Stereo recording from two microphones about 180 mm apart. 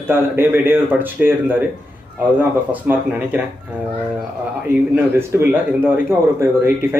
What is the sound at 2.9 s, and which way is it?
Speech, 10° right (ahead or behind).